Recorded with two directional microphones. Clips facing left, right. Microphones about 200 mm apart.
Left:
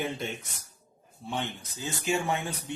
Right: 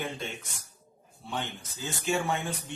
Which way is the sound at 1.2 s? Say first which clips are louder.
Left 2 dB; 20° left (ahead or behind).